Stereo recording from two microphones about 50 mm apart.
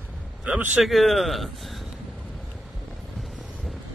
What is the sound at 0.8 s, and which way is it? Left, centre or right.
A man's voice, centre.